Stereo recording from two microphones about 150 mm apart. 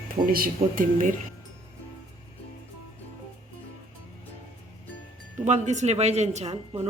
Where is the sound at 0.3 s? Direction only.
70° right (ahead or behind).